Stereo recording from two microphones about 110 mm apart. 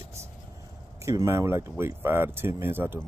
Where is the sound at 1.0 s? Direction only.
30° right (ahead or behind).